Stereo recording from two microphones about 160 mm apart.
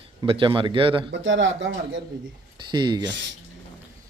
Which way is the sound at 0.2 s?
30° right (ahead or behind).